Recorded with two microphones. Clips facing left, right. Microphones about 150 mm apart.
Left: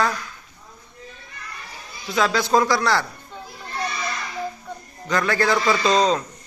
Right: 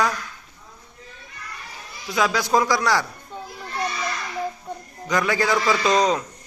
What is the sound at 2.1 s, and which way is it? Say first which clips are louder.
Speech: left 1 dB; 10° right (ahead or behind).